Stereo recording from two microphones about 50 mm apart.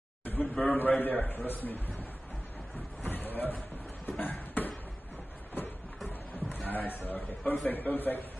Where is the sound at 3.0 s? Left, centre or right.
Left.